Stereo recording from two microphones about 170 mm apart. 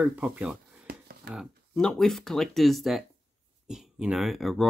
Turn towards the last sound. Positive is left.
turn(degrees=0)  # may be behind; listen again after turning